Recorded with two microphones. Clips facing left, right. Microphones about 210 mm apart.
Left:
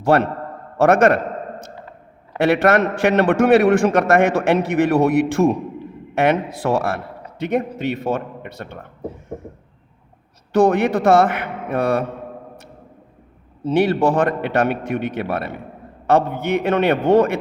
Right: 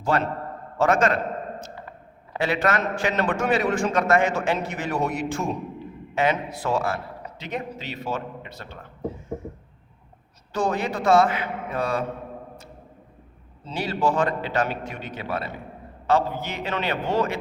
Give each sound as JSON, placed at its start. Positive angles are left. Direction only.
{"t": 0.0, "sound": "a man's voice", "side_deg": 65}
{"t": 0.8, "sound": "a sound", "side_deg": 65}
{"t": 2.4, "sound": "a man's voice", "side_deg": 65}
{"t": 10.5, "sound": "a man's voice", "side_deg": 60}
{"t": 13.7, "sound": "a man's voice", "side_deg": 60}